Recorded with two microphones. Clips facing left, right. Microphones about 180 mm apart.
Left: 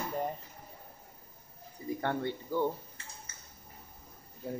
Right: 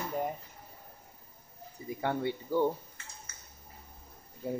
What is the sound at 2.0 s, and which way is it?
Speech, 10° right (ahead or behind).